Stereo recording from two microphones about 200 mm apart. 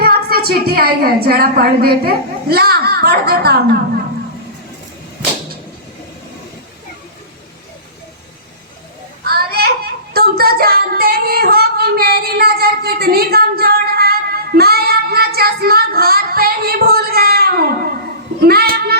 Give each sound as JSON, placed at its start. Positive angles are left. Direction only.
{"t": 0.0, "sound": "a woman's voice", "side_deg": -50}
{"t": 9.2, "sound": "child singing", "side_deg": -50}
{"t": 18.4, "sound": "a woman's voice", "side_deg": -50}